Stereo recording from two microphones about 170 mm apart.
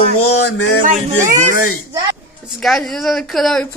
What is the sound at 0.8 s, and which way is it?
Music, 50° right (ahead or behind).